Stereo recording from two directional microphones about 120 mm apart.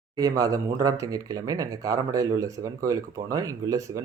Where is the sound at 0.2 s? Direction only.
30° right (ahead or behind).